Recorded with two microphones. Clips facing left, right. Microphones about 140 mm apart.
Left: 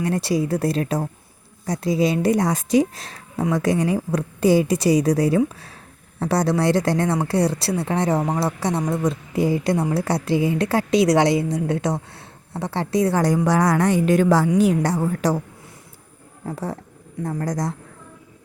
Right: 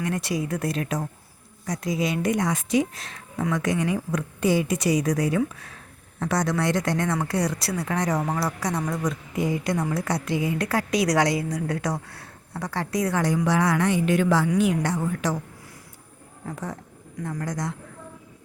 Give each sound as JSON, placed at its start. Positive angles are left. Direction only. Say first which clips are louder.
{"t": 0.0, "sound": "a woman's voice", "louder": "left 5 dB", "side_deg": 35}
{"t": 16.5, "sound": "a woman's voice", "louder": "left 5 dB", "side_deg": 30}